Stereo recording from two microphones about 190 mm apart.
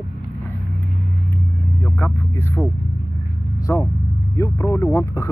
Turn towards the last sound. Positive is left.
turn(degrees=15)  # may be behind; listen again after turning